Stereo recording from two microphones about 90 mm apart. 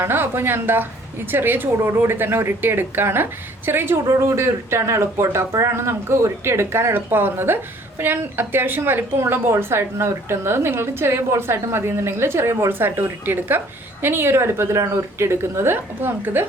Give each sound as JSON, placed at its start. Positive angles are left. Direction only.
{"t": 0.0, "sound": "speech", "side_deg": -25}